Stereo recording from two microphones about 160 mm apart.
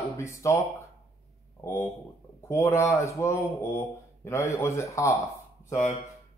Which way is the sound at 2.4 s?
15° left (ahead or behind).